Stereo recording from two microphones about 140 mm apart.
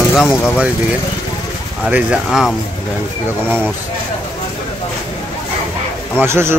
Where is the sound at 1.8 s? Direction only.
10° right (ahead or behind).